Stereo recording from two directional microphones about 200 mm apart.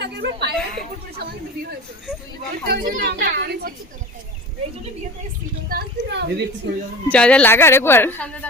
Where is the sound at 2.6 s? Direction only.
50° right (ahead or behind).